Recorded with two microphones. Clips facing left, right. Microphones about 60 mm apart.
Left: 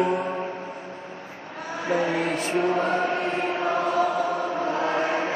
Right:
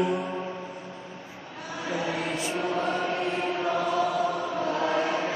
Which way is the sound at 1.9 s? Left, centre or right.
Left.